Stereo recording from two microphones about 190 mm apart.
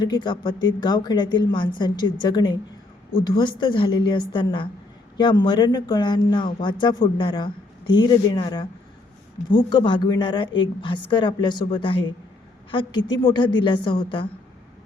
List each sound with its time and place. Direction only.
0.0 s speech: 25° left (ahead or behind)